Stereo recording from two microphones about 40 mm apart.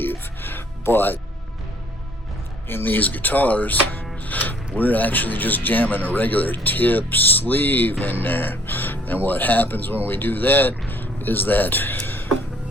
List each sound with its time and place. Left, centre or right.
0.0 s music: left
2.6 s speech: left